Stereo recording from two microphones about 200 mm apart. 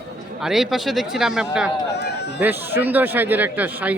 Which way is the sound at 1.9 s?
55° left (ahead or behind).